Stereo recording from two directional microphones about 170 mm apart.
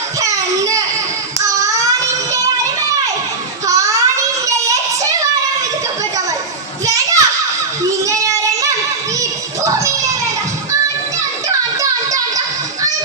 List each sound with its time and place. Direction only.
0.2 s a sound: 20° right (ahead or behind)
1.5 s baby cry: 20° right (ahead or behind)
3.7 s child singing: 20° right (ahead or behind)
6.8 s children playing: 20° right (ahead or behind)
8.0 s child singing: 20° right (ahead or behind)
11.4 s a sound: 20° right (ahead or behind)